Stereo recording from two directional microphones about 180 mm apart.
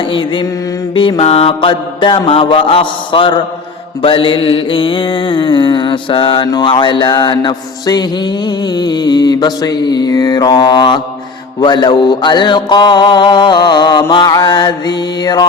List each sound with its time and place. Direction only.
0.0 s mantra: 30° left (ahead or behind)